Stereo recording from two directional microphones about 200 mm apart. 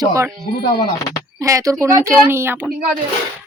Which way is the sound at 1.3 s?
15° right (ahead or behind).